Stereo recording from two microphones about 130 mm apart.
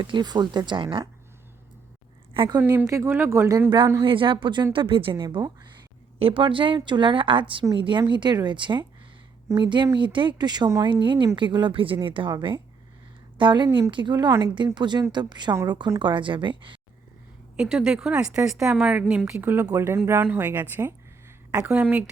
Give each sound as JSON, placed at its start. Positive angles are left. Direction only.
{"t": 0.0, "sound": "a woman's voice", "side_deg": -35}
{"t": 2.3, "sound": "a woman's voice", "side_deg": -40}
{"t": 2.6, "sound": "speech", "side_deg": -20}
{"t": 4.0, "sound": "a woman's voice", "side_deg": -40}
{"t": 17.6, "sound": "speech", "side_deg": -5}